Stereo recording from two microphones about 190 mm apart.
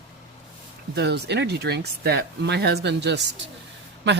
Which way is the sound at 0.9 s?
60° right (ahead or behind).